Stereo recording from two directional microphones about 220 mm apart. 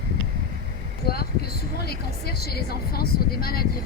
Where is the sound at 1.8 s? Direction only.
45° left (ahead or behind).